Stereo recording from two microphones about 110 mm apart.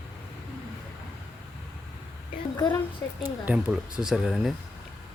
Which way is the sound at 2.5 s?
35° left (ahead or behind).